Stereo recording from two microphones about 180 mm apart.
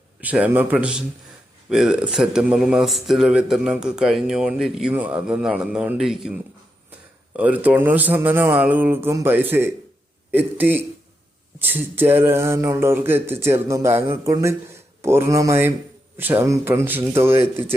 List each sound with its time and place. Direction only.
0.2 s a man's voice: 10° right (ahead or behind)